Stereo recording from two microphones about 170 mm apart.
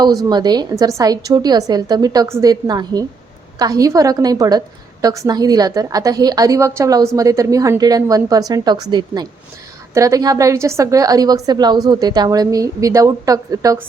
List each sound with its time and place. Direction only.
0.3 s a woman's voice: 25° right (ahead or behind)